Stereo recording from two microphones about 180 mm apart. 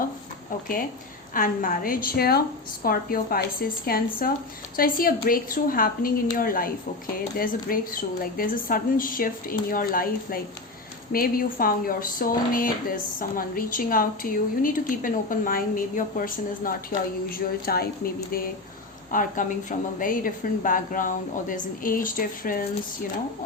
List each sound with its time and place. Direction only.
1.3 s a woman's voice: 50° left (ahead or behind)